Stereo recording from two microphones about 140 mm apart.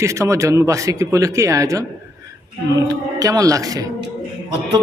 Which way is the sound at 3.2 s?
25° right (ahead or behind).